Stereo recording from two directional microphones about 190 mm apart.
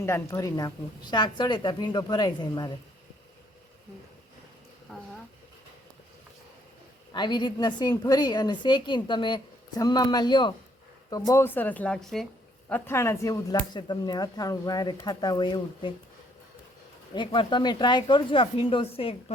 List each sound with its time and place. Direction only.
0.0 s a woman's voice: 15° left (ahead or behind)
4.9 s a sound: centre (ahead or behind)
7.1 s a woman's voice: 25° left (ahead or behind)
17.2 s a woman's voice: 25° left (ahead or behind)